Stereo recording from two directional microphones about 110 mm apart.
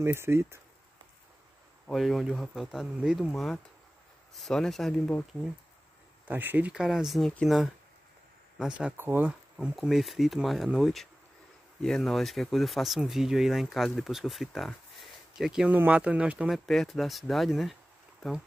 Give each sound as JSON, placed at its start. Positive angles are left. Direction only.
{"t": 0.0, "sound": "speech", "side_deg": -20}
{"t": 1.9, "sound": "speech", "side_deg": 0}
{"t": 6.2, "sound": "speech", "side_deg": -15}
{"t": 6.7, "sound": "speech", "side_deg": -5}
{"t": 8.9, "sound": "speech", "side_deg": -20}
{"t": 9.8, "sound": "speech", "side_deg": 0}
{"t": 16.5, "sound": "speech", "side_deg": 0}